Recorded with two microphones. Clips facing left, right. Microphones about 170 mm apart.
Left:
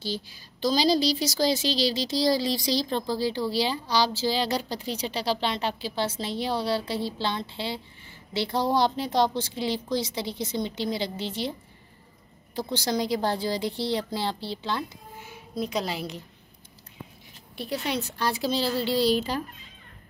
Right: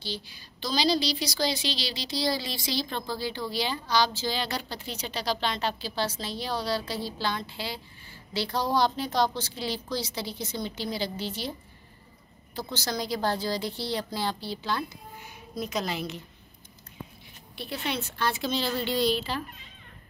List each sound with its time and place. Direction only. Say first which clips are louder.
0.0 s a woman's voice: left 4 dB; 45° left (ahead or behind); by 11.5 s 25° left (ahead or behind)
12.8 s a woman's voice: left 3 dB; 15° left (ahead or behind)
17.6 s a woman's voice: left 3 dB; 40° left (ahead or behind)